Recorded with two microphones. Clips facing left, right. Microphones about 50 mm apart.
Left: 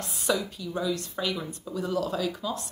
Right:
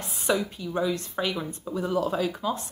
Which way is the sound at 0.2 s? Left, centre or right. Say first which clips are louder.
Right 2 dB; right.